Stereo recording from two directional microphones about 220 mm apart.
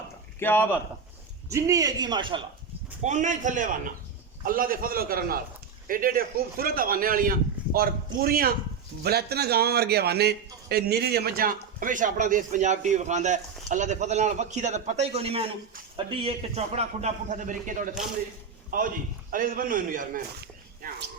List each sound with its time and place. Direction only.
0.3 s speech: 10° left (ahead or behind)
1.5 s a man's voice: 15° right (ahead or behind)
3.0 s a man's voice: 35° right (ahead or behind)
19.3 s a man's voice: 40° right (ahead or behind)